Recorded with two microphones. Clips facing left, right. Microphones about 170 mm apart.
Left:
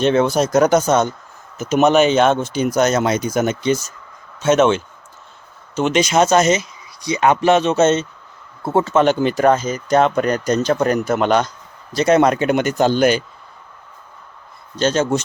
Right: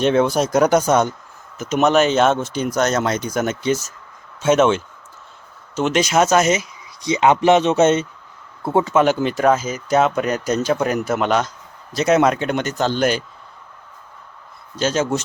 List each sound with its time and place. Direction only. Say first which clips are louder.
0.0 s speech: left 1 dB; 5° right (ahead or behind)
1.5 s speech: left 2 dB; 5° left (ahead or behind)
7.0 s speech: even; 20° right (ahead or behind); by 13.0 s 10° left (ahead or behind)
13.0 s speech: left 2 dB; centre (ahead or behind)
14.8 s speech: left 2 dB; 5° right (ahead or behind)